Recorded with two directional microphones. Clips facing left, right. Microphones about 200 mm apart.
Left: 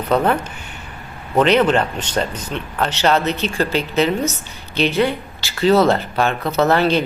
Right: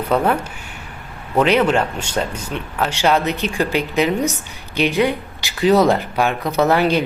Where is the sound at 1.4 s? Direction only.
5° right (ahead or behind).